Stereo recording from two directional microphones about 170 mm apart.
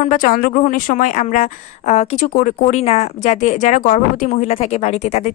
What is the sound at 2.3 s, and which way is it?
Speech, 50° left (ahead or behind).